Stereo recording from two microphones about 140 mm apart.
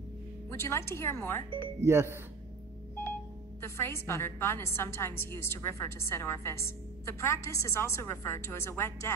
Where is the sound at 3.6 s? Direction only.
20° left (ahead or behind).